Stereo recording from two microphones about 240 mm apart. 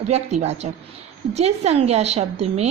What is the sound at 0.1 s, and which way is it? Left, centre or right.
A woman's voice, right.